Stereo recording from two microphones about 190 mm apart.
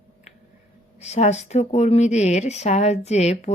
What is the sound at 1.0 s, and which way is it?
Speech, 35° left (ahead or behind).